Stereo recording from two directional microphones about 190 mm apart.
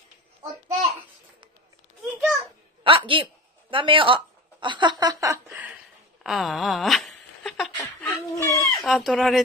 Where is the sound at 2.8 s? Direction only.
30° right (ahead or behind).